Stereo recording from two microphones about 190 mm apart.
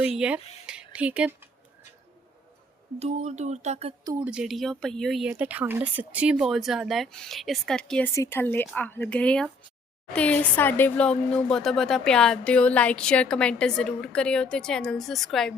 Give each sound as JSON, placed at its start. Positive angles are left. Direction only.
{"t": 0.2, "sound": "speech", "side_deg": -5}
{"t": 0.6, "sound": "a sound", "side_deg": -5}
{"t": 3.0, "sound": "speech", "side_deg": -35}
{"t": 4.2, "sound": "speech", "side_deg": -5}